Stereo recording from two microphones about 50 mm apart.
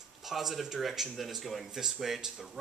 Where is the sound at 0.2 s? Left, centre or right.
Centre.